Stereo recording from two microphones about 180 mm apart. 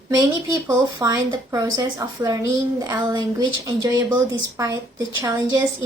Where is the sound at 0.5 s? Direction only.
20° right (ahead or behind).